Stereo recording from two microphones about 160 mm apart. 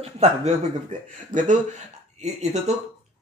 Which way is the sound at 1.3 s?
50° right (ahead or behind).